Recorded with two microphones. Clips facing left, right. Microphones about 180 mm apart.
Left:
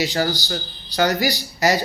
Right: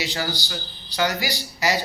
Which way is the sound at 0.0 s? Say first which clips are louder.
Left 6 dB; 45° left (ahead or behind).